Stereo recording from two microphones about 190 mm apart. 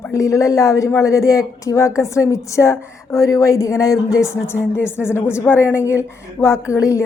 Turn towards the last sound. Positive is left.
turn(degrees=15)  # may be behind; listen again after turning